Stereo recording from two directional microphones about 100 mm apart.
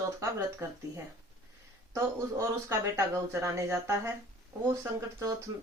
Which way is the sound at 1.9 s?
30° right (ahead or behind).